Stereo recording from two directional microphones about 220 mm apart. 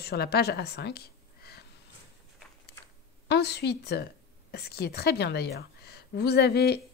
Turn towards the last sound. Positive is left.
turn(degrees=45)  # may be behind; listen again after turning